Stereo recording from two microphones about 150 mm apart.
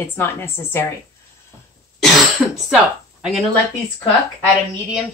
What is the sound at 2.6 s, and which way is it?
Speech, 5° right (ahead or behind).